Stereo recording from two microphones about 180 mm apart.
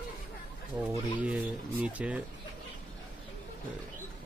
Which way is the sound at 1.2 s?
5° right (ahead or behind).